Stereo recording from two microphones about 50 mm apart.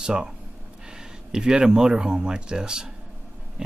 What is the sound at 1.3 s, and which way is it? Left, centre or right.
Speech, centre.